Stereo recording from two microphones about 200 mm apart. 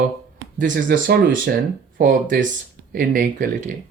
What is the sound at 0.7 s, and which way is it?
Speech, 55° right (ahead or behind).